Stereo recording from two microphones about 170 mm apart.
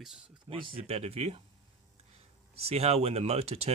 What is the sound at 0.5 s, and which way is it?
Speech, 30° right (ahead or behind).